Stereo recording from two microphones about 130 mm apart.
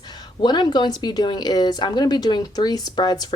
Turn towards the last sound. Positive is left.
turn(degrees=30)  # may be behind; listen again after turning